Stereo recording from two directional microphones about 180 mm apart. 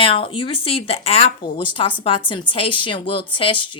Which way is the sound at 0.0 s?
30° left (ahead or behind).